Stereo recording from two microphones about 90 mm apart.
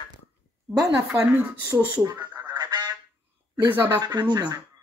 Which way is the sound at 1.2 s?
20° right (ahead or behind).